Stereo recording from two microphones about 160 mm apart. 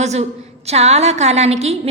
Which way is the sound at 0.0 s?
45° right (ahead or behind).